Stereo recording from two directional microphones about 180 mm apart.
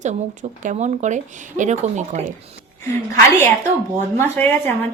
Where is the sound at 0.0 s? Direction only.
40° right (ahead or behind).